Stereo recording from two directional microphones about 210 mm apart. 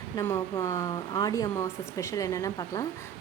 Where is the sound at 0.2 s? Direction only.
15° left (ahead or behind).